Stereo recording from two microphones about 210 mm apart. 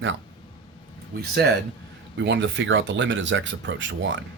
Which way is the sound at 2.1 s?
55° right (ahead or behind).